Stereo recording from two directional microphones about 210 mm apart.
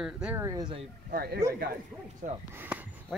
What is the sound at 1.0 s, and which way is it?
Speech, 45° right (ahead or behind).